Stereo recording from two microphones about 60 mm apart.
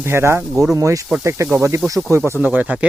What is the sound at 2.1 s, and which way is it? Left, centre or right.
Speech, right.